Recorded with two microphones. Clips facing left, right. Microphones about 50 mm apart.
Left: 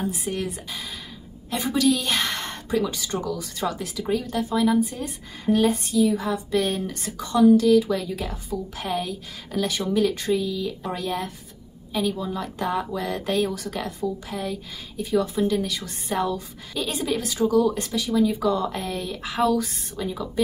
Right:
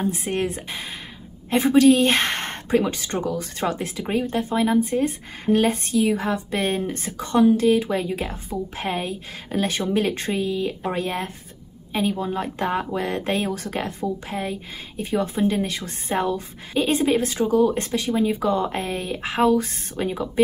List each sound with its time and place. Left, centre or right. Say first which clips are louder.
0.0 s a woman's voice: right 4 dB; right